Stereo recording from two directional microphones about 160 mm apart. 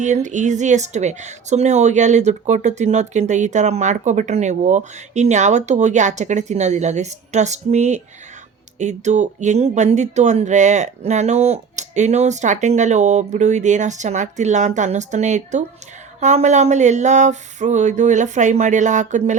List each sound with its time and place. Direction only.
0.0 s a woman's voice: 50° right (ahead or behind)